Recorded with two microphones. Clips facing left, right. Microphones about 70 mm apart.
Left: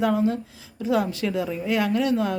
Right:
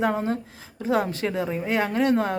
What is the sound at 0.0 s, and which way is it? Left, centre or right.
Speech, right.